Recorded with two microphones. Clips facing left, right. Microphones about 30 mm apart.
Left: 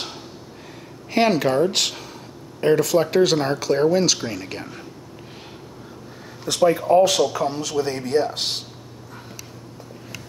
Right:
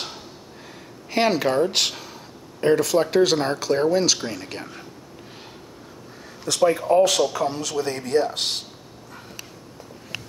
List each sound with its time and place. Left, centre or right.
1.1 s speech: centre
6.4 s speech: centre
10.1 s a sound: right